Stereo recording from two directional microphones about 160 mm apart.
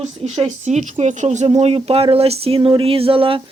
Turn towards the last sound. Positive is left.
turn(degrees=-35)  # may be behind; listen again after turning